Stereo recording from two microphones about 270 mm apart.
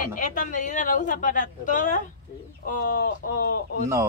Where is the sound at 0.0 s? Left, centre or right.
Left.